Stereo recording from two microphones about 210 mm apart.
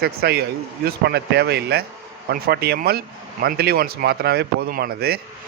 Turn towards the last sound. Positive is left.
turn(degrees=-45)  # may be behind; listen again after turning